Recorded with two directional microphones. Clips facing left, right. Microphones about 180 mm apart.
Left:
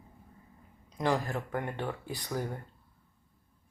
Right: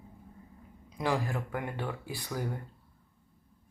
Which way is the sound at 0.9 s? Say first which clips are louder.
Left 1 dB; 5° right (ahead or behind).